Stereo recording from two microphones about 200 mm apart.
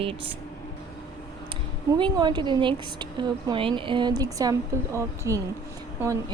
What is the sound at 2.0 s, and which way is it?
Speech, 20° right (ahead or behind).